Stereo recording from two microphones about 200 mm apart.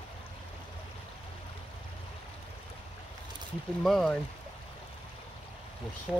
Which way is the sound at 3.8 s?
Centre (ahead or behind).